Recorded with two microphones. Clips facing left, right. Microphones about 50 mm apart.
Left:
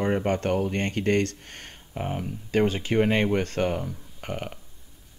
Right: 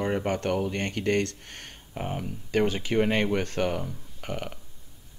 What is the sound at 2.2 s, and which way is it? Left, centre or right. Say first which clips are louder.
Speech: left 2 dB; left.